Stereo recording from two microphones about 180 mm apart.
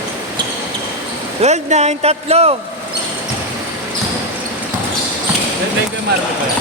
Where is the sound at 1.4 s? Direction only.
40° right (ahead or behind).